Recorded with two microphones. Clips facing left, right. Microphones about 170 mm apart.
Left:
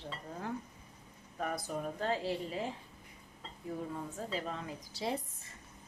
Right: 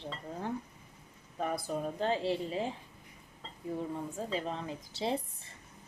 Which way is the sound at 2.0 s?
25° right (ahead or behind).